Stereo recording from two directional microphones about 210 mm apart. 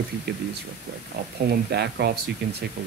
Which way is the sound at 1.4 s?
50° right (ahead or behind).